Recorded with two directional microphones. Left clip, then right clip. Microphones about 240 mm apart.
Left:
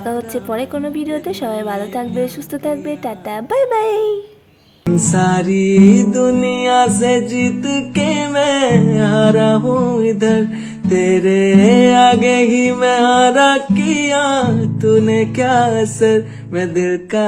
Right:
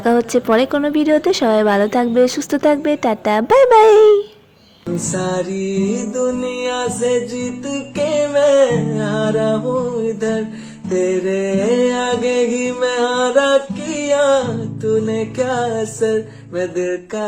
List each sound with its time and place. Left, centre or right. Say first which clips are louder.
0.0 s speech: right 6 dB; right
5.1 s music: left 4 dB; left